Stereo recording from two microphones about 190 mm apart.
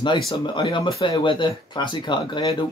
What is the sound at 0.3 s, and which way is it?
Speech, 25° left (ahead or behind).